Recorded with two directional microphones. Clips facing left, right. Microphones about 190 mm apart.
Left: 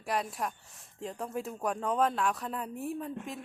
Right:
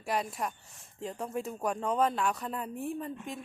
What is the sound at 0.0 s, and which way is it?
Speech, centre (ahead or behind).